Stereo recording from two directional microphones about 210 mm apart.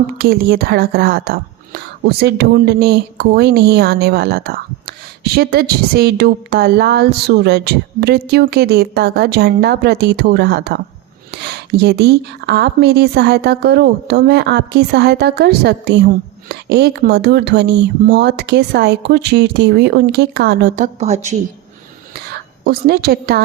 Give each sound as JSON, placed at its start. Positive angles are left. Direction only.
{"t": 0.2, "sound": "speech", "side_deg": -45}
{"t": 22.6, "sound": "speech", "side_deg": -45}